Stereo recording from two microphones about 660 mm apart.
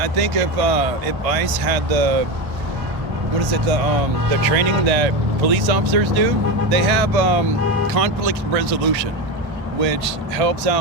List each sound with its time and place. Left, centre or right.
0.0 s speech: right
4.4 s speech: right
9.8 s speech: right